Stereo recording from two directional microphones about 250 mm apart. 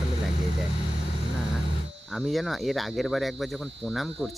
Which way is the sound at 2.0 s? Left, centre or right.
Centre.